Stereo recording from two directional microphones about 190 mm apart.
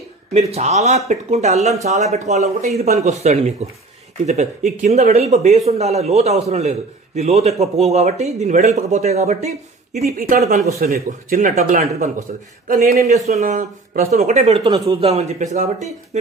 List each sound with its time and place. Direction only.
0.3 s a man's voice: 35° right (ahead or behind)
4.8 s a man's voice: 40° right (ahead or behind)